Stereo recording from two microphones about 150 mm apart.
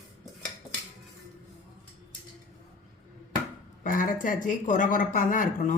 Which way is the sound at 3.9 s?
65° left (ahead or behind).